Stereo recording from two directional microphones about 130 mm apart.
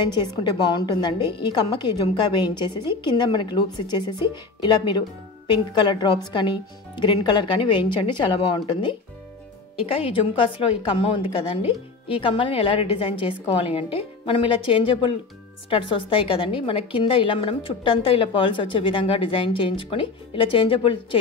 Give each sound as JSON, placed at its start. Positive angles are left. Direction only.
{"t": 0.0, "sound": "a woman's voice", "side_deg": 35}